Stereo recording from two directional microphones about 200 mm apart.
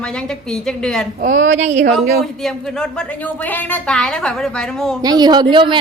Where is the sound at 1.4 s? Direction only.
35° right (ahead or behind).